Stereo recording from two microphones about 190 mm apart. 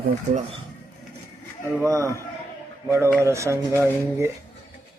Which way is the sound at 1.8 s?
15° right (ahead or behind).